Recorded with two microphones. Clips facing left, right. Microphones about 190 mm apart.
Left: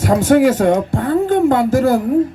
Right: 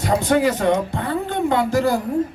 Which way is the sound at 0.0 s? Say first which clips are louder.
Left 6 dB; 45° left (ahead or behind).